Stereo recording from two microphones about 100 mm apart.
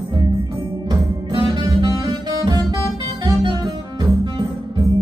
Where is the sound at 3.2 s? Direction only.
50° right (ahead or behind).